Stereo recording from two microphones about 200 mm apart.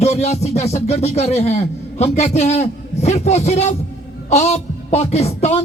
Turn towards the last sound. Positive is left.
turn(degrees=30)  # may be behind; listen again after turning